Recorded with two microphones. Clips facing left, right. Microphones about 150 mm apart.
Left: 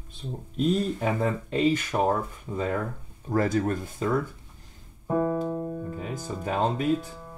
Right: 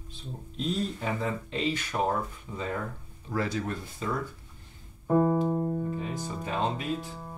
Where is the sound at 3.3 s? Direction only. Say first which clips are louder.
Left 6 dB; 45° left (ahead or behind).